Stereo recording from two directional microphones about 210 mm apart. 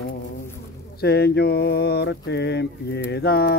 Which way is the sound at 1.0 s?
50° left (ahead or behind).